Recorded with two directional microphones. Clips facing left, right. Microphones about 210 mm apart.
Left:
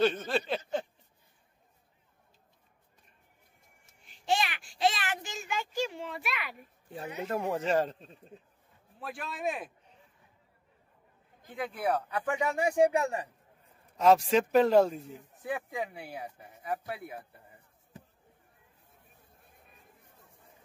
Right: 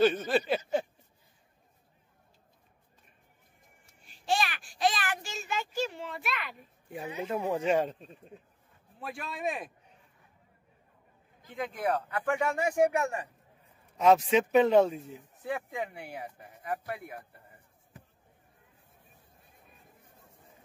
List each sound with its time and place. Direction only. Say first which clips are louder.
0.0 s a sound: right 3 dB; 5° right (ahead or behind)
4.0 s a sound: even; 20° left (ahead or behind); by 6.5 s centre (ahead or behind)
6.9 s speech: right 1 dB; 10° right (ahead or behind)
11.5 s speech: even; 10° left (ahead or behind)
12.9 s speech: left 1 dB; 35° left (ahead or behind)
13.9 s speech: even; 5° right (ahead or behind)
15.4 s speech: even; 10° left (ahead or behind)